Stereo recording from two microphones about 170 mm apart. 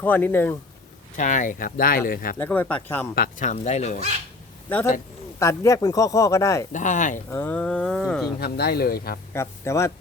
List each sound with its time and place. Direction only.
0.0 s speech: 10° left (ahead or behind)
1.1 s speech: 50° left (ahead or behind)
2.4 s speech: 10° left (ahead or behind)
3.2 s speech: 50° left (ahead or behind)
5.4 s speech: 15° left (ahead or behind)
6.7 s speech: 45° left (ahead or behind)
7.3 s speech: 10° left (ahead or behind)
8.4 s speech: 70° left (ahead or behind)
9.3 s speech: 15° left (ahead or behind)